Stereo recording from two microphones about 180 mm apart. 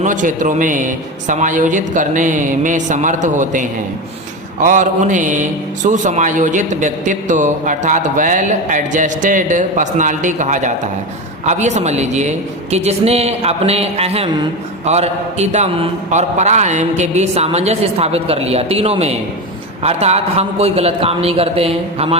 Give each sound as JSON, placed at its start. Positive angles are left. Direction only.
{"t": 0.0, "sound": "a man's voice", "side_deg": -45}